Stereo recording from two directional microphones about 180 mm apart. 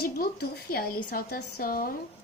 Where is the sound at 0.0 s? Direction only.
55° left (ahead or behind).